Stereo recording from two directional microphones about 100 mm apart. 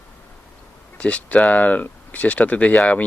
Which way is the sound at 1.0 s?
10° left (ahead or behind).